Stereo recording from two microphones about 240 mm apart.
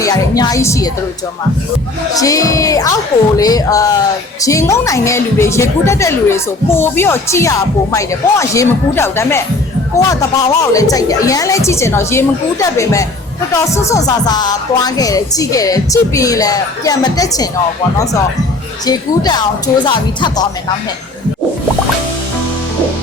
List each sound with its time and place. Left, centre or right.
0.0 s speech: centre
2.1 s speech: centre
18.9 s speech: centre